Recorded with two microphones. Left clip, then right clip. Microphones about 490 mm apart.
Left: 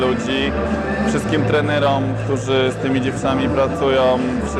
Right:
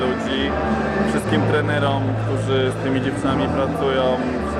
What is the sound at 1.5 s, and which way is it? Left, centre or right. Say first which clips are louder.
Speech: left 7 dB; left.